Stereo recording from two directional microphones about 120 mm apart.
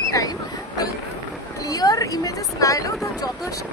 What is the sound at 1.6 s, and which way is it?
Speech, 30° left (ahead or behind).